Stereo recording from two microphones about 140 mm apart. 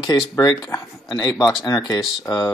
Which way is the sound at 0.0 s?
25° left (ahead or behind).